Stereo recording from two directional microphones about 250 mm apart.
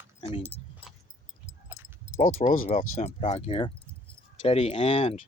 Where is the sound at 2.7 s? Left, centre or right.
Left.